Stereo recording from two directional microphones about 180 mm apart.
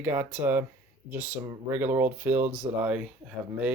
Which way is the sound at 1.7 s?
10° right (ahead or behind).